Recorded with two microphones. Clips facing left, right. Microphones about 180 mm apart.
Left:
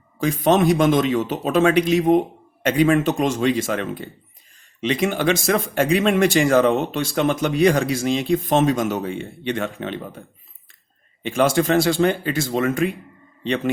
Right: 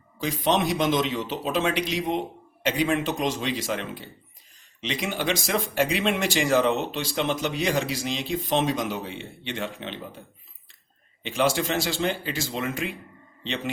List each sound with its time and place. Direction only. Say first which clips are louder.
0.2 s speech: left 7 dB; 50° left (ahead or behind)
11.2 s speech: left 6 dB; 50° left (ahead or behind)